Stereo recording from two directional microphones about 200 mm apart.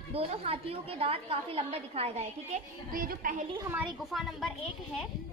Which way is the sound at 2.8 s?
45° right (ahead or behind).